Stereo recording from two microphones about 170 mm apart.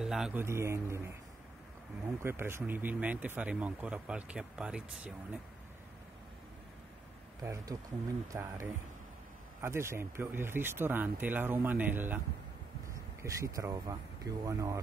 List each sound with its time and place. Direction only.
0.0 s a sound: centre (ahead or behind)
0.4 s speech: 15° right (ahead or behind)
2.2 s speech: 15° right (ahead or behind)
7.4 s speech: 20° right (ahead or behind)